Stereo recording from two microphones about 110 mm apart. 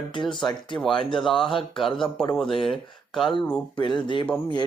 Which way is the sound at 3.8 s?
45° left (ahead or behind).